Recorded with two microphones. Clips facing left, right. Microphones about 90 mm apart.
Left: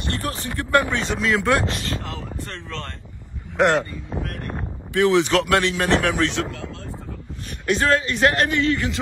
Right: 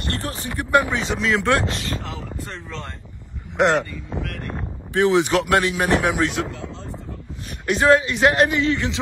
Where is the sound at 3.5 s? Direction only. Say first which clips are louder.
Even; 10° right (ahead or behind).